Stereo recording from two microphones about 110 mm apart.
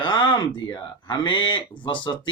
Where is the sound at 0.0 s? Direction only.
45° left (ahead or behind).